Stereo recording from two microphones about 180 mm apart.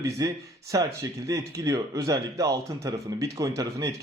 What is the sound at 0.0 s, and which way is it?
A man's voice, 20° right (ahead or behind).